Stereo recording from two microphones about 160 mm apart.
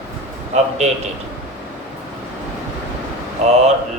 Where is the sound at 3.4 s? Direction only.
45° right (ahead or behind).